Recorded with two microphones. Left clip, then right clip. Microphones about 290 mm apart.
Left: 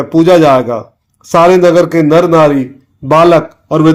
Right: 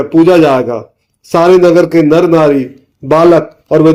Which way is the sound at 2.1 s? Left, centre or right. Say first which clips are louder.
Left 3 dB; left.